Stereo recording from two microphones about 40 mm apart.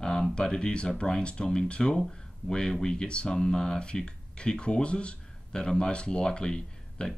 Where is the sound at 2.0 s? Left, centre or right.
Centre.